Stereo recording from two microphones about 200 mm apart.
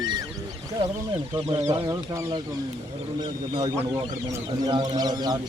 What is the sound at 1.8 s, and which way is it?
Speech, 15° right (ahead or behind).